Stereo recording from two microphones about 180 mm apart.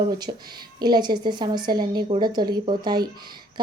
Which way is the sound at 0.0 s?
20° right (ahead or behind).